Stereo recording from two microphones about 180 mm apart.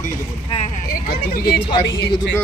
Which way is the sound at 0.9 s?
60° left (ahead or behind).